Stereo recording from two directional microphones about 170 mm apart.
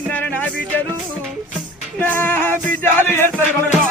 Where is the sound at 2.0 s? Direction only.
10° left (ahead or behind).